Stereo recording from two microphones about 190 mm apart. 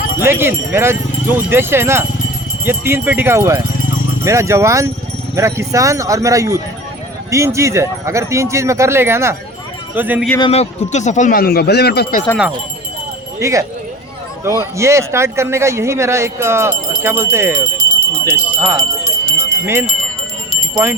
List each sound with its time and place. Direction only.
0.2 s speech: 10° right (ahead or behind)
10.5 s speech: 35° left (ahead or behind); by 12.2 s 60° left (ahead or behind)
13.4 s speech: 15° right (ahead or behind)
17.7 s alarm: 65° right (ahead or behind)
18.4 s speech: 10° right (ahead or behind)
18.8 s jingle bell: 20° right (ahead or behind)